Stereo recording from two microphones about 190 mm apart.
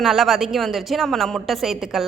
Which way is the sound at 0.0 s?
Centre (ahead or behind).